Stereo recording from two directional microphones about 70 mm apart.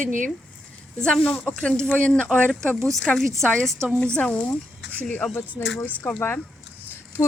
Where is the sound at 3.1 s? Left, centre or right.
Centre.